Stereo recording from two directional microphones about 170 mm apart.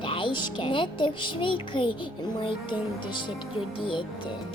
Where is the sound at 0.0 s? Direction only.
30° left (ahead or behind).